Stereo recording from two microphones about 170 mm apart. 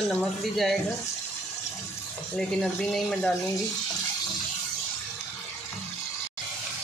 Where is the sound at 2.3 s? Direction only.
5° left (ahead or behind).